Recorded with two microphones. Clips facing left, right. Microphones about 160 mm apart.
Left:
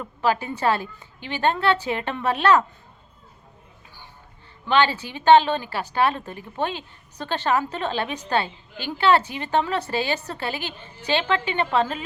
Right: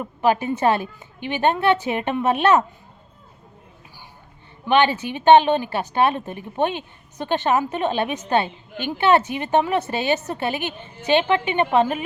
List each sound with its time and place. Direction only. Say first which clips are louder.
0.0 s a woman's voice: right 3 dB; 20° right (ahead or behind)
4.6 s a woman's voice: right 3 dB; 20° right (ahead or behind)